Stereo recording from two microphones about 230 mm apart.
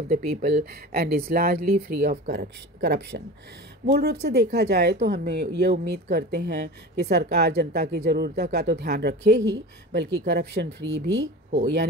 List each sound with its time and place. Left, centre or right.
0.1 s speech: right